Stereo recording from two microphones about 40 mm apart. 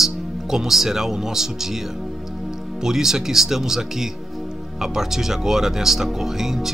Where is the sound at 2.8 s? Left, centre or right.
Centre.